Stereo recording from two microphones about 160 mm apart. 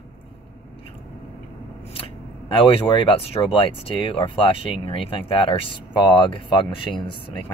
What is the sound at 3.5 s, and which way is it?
Speech, 35° left (ahead or behind).